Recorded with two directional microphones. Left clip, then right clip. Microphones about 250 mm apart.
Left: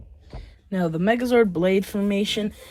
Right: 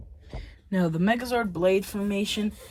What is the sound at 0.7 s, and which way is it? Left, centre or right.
Speech, left.